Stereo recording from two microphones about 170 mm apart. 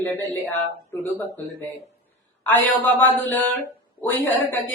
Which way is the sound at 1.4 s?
20° left (ahead or behind).